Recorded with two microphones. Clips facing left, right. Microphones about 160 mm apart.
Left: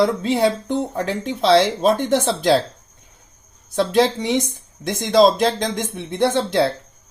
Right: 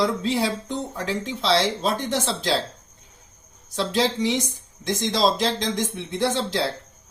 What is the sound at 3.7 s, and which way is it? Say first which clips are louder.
Speech: left 6 dB; 55° left (ahead or behind).